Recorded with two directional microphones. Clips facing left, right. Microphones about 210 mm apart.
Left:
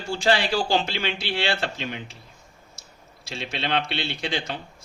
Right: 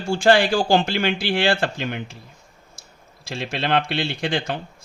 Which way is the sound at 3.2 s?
55° right (ahead or behind).